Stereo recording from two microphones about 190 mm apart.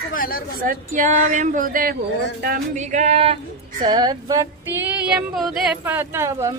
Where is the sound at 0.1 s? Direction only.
50° left (ahead or behind).